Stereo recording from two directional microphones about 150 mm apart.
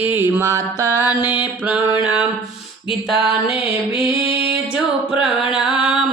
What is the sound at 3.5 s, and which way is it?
Mantra, 35° left (ahead or behind).